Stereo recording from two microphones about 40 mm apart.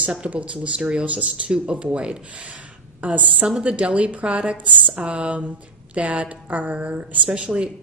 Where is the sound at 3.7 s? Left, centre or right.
Right.